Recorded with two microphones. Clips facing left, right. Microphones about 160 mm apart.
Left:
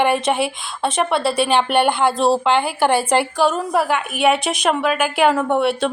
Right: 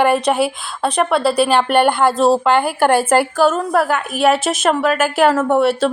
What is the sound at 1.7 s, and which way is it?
Speech, 50° right (ahead or behind).